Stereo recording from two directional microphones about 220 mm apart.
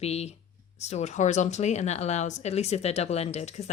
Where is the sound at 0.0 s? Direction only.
30° left (ahead or behind).